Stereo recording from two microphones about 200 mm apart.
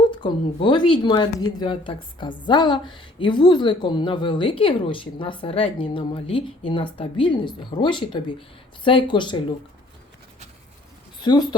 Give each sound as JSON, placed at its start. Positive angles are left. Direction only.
{"t": 0.1, "sound": "speech", "side_deg": 25}
{"t": 11.2, "sound": "speech", "side_deg": 20}